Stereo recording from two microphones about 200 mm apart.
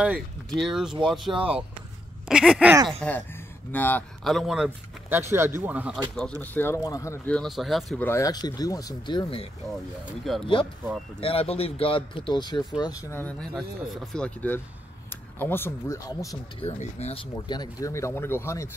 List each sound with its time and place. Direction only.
0.0 s speech: 5° right (ahead or behind)
6.4 s speech: 10° left (ahead or behind)
8.1 s a man's voice: 15° left (ahead or behind)
10.0 s speech: centre (ahead or behind)
10.4 s a man's voice: 25° left (ahead or behind)
16.6 s speech: 30° left (ahead or behind); by 18.7 s 15° left (ahead or behind)